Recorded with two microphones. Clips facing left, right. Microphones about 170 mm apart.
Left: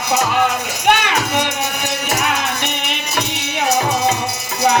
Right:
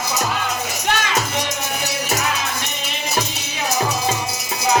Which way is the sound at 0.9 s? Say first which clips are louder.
Left 6 dB; 65° left (ahead or behind).